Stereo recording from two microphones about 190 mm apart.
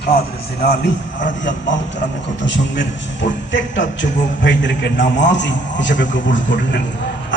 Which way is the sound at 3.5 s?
70° left (ahead or behind).